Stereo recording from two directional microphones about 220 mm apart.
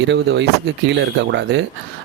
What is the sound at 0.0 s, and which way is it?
Speech, 55° right (ahead or behind).